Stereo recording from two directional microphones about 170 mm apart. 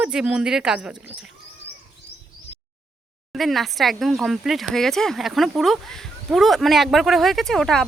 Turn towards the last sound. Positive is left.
turn(degrees=0)  # may be behind; listen again after turning